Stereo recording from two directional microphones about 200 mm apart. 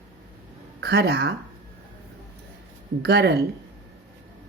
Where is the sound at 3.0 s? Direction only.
55° right (ahead or behind).